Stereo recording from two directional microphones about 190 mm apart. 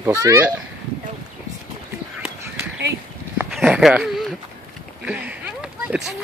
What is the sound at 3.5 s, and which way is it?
Dog, centre (ahead or behind).